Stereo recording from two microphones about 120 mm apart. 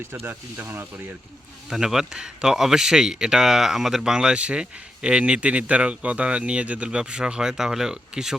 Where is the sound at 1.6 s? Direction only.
5° right (ahead or behind).